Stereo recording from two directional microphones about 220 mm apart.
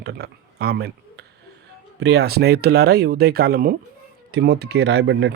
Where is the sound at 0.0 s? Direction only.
50° right (ahead or behind).